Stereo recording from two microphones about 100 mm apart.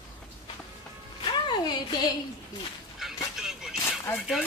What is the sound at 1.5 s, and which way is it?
Music, 50° left (ahead or behind).